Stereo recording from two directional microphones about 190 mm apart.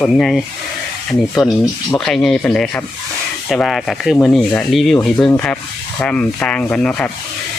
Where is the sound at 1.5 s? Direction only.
15° left (ahead or behind).